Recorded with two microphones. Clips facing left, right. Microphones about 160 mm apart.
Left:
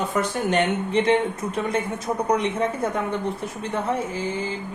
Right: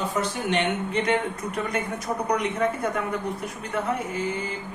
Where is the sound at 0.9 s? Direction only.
30° left (ahead or behind).